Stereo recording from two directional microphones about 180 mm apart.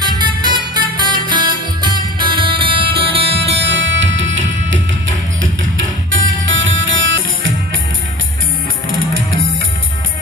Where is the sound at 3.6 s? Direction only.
75° right (ahead or behind).